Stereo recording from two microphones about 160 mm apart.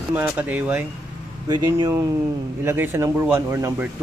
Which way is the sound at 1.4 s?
25° right (ahead or behind).